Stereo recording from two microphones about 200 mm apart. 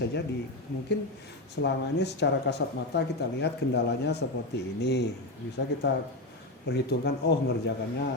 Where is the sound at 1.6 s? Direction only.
55° left (ahead or behind).